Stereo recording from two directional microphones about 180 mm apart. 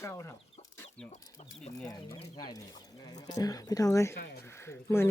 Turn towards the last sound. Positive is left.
turn(degrees=15)  # may be behind; listen again after turning